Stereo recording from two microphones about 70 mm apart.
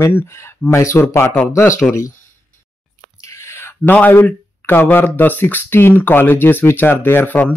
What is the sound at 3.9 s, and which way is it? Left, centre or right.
Speech, left.